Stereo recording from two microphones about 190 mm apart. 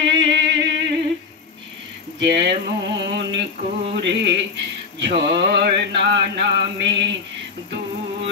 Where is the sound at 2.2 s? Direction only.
65° right (ahead or behind).